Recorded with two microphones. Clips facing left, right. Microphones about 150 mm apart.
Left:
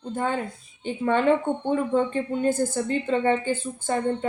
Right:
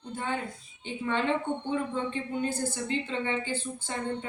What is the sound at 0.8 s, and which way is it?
Speech, 50° left (ahead or behind).